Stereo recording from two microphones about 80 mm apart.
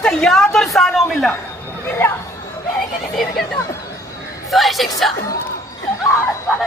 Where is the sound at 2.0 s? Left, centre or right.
Left.